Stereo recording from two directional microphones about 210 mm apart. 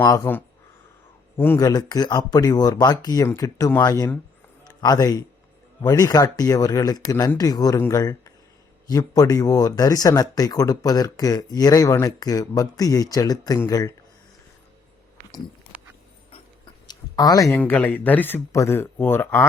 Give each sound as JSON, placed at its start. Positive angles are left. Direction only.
{"t": 0.0, "sound": "a man's voice", "side_deg": 15}
{"t": 16.8, "sound": "a sound", "side_deg": 20}
{"t": 17.5, "sound": "speech", "side_deg": 5}